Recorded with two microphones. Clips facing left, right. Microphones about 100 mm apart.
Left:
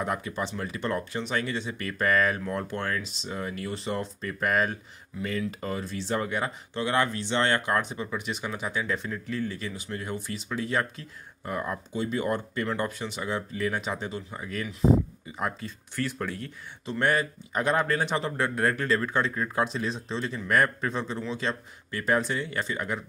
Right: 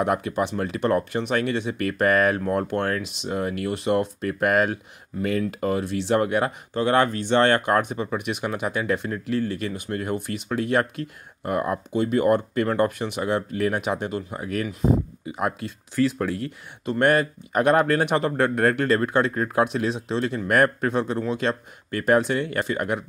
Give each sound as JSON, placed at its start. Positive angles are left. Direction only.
{"t": 0.0, "sound": "speech", "side_deg": -65}
{"t": 6.7, "sound": "speech", "side_deg": -50}
{"t": 16.8, "sound": "speech", "side_deg": -55}